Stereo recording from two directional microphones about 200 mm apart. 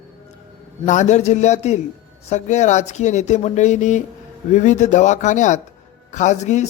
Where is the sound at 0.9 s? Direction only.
35° left (ahead or behind).